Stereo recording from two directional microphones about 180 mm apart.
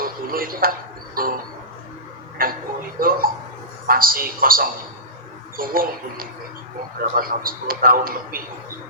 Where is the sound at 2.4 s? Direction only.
55° right (ahead or behind).